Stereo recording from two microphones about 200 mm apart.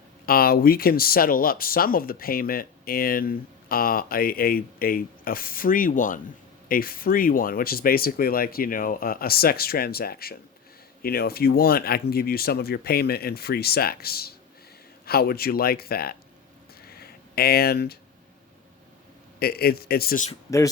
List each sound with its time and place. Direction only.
0.3 s speech: 50° left (ahead or behind)
16.8 s a sound: 50° left (ahead or behind)
19.4 s speech: 50° left (ahead or behind)